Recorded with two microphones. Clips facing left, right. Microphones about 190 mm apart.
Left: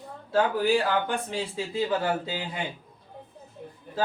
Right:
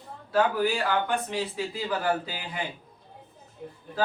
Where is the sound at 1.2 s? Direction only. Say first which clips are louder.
Right 1 dB; 25° left (ahead or behind).